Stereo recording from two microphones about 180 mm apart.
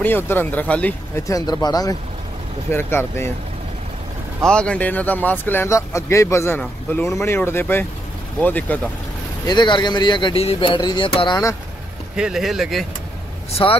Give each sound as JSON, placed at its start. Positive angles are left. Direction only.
{"t": 0.0, "sound": "speech", "side_deg": 10}
{"t": 4.5, "sound": "speech", "side_deg": 5}
{"t": 9.5, "sound": "speech", "side_deg": 25}
{"t": 12.2, "sound": "speech", "side_deg": 0}
{"t": 13.5, "sound": "speech", "side_deg": 30}